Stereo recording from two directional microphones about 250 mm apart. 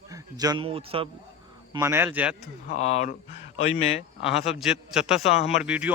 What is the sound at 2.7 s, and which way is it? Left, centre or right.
Speech, left.